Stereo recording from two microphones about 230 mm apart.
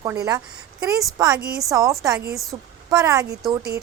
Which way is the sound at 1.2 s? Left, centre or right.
Centre.